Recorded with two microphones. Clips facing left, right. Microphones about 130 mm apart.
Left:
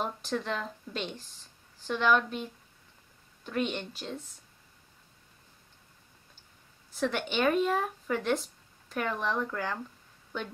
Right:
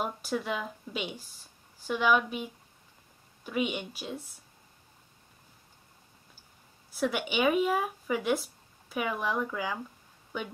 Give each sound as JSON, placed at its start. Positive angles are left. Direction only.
{"t": 0.0, "sound": "a woman's voice", "side_deg": -10}
{"t": 6.9, "sound": "speech", "side_deg": -10}